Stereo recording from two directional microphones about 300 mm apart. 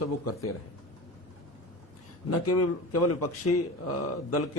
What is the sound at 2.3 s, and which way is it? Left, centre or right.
Speech, left.